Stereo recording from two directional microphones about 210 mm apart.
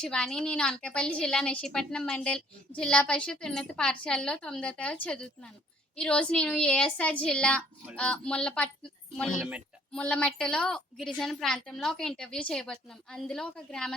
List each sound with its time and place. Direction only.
0.0 s a woman's voice: 5° left (ahead or behind)